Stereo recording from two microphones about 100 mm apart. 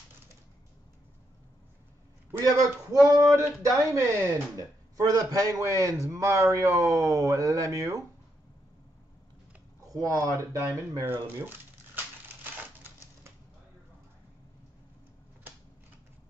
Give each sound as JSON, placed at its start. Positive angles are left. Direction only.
{"t": 2.5, "sound": "a man's voice", "side_deg": -35}
{"t": 9.9, "sound": "a man's voice", "side_deg": -40}